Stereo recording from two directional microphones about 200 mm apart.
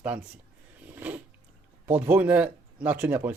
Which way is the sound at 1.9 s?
10° right (ahead or behind).